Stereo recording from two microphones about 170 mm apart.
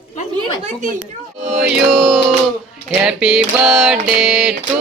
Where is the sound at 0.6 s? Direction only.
45° right (ahead or behind).